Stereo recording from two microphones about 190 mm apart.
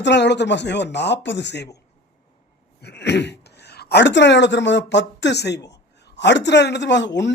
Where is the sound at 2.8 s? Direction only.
60° left (ahead or behind).